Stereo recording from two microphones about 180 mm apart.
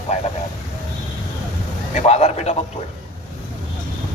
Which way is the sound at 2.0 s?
35° left (ahead or behind).